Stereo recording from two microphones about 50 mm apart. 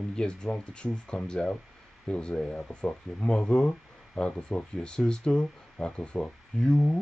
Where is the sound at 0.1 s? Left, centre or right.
Centre.